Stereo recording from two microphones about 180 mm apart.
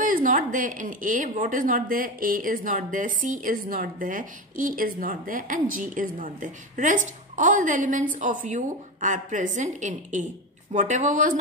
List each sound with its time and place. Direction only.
0.0 s speech: 50° right (ahead or behind)